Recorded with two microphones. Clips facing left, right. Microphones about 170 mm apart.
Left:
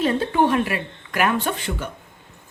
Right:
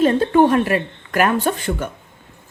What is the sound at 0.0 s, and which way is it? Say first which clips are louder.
Speech: right 6 dB; 45° right (ahead or behind).